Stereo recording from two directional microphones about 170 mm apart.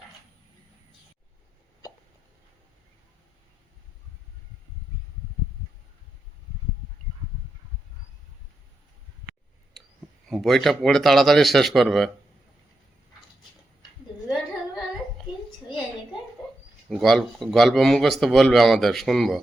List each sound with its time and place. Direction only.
10.2 s a man's voice: centre (ahead or behind)
16.4 s bird: 5° left (ahead or behind)
16.9 s a man's voice: centre (ahead or behind)